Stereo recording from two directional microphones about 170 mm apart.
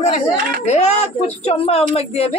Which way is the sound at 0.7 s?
40° left (ahead or behind).